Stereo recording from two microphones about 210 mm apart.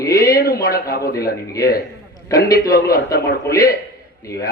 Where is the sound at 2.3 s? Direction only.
15° left (ahead or behind).